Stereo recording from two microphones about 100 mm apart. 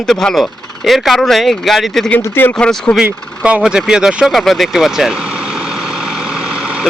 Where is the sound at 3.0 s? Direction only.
15° right (ahead or behind).